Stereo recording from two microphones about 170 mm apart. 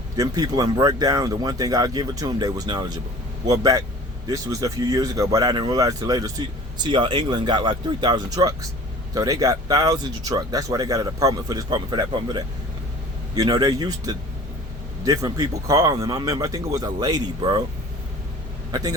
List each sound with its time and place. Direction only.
0.2 s speech: 25° right (ahead or behind)
18.7 s speech: 20° right (ahead or behind)